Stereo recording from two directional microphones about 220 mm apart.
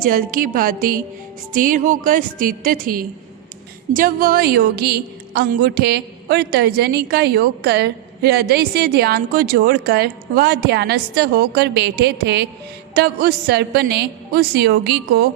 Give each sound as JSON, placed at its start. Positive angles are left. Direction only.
{"t": 0.0, "sound": "a woman's voice", "side_deg": -40}